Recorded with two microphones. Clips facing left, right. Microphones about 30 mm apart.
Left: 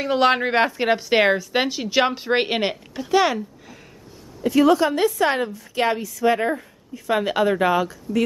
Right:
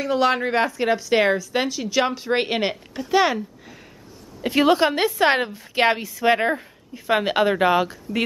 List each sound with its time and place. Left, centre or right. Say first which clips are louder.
0.0 s a woman's voice: left 2 dB; left; by 2.8 s centre
3.1 s speech: even; centre
4.4 s a woman's voice: left 1 dB; right